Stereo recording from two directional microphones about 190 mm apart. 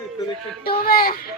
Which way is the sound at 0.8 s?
50° left (ahead or behind).